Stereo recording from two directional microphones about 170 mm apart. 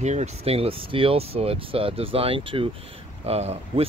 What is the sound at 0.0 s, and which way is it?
Speech, 40° right (ahead or behind).